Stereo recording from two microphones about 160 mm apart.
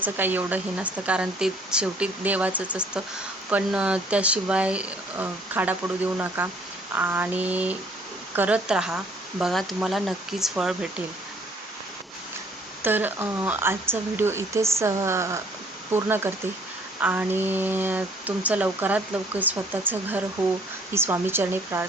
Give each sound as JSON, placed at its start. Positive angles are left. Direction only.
{"t": 0.0, "sound": "speech", "side_deg": -10}
{"t": 12.8, "sound": "speech", "side_deg": -10}